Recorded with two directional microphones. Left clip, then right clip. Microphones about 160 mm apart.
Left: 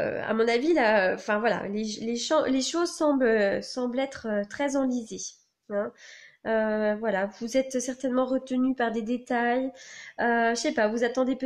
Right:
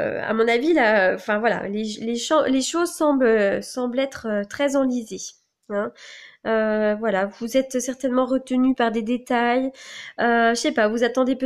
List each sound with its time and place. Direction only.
0.0 s speech: 20° right (ahead or behind)